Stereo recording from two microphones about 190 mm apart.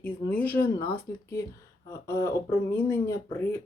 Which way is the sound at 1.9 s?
15° left (ahead or behind).